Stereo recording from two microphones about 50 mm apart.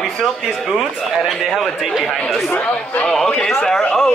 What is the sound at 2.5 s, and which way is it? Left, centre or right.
Speech, left.